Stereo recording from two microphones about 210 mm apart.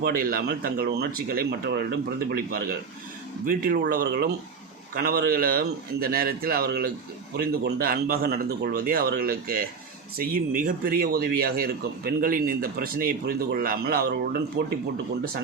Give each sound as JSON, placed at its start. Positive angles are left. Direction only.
{"t": 0.0, "sound": "speech", "side_deg": -45}
{"t": 14.6, "sound": "speech", "side_deg": -60}